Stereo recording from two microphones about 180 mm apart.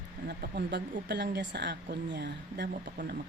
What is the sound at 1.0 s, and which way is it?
Speech, 70° right (ahead or behind).